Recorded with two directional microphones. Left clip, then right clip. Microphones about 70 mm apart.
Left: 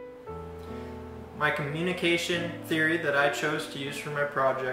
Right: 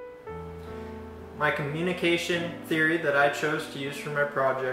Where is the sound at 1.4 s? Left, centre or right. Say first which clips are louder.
Right 1 dB; centre.